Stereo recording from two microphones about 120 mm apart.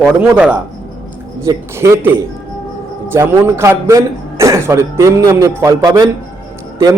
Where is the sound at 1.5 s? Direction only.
25° right (ahead or behind).